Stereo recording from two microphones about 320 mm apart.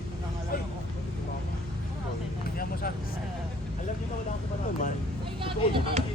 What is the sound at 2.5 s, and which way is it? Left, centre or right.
Speech, left.